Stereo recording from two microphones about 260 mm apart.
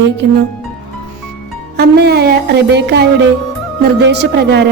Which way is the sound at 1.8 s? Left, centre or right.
Right.